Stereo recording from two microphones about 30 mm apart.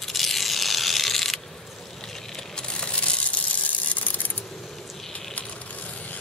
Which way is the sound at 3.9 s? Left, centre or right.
Left.